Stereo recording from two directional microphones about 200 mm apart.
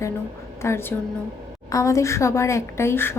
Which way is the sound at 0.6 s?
10° left (ahead or behind).